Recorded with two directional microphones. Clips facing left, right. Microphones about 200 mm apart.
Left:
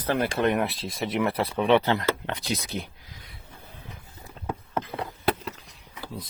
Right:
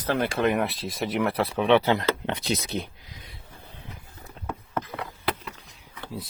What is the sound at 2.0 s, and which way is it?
Speech, 25° right (ahead or behind).